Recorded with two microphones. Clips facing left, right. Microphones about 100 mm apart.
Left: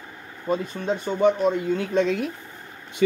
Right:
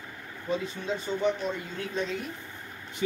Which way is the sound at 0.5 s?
50° left (ahead or behind).